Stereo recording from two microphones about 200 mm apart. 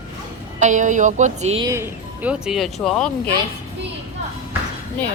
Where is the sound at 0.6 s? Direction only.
40° right (ahead or behind).